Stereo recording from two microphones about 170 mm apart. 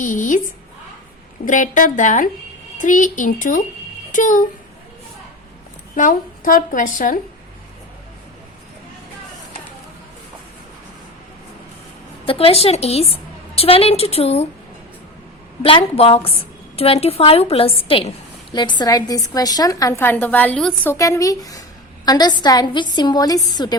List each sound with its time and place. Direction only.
0.0 s a woman's voice: 50° left (ahead or behind)
1.5 s a woman's voice: 50° left (ahead or behind)
6.0 s a woman's voice: 55° left (ahead or behind)
12.2 s speech: 35° left (ahead or behind)
15.6 s a woman's voice: 35° left (ahead or behind); by 20.9 s 5° left (ahead or behind)
20.9 s a woman's voice: 20° left (ahead or behind)